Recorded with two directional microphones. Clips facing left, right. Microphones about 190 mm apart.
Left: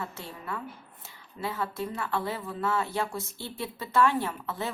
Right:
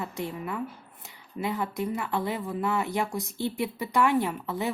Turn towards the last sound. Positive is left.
turn(degrees=-15)  # may be behind; listen again after turning